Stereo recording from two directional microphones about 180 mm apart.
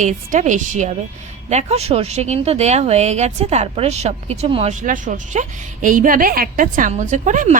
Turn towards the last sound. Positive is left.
turn(degrees=-45)  # may be behind; listen again after turning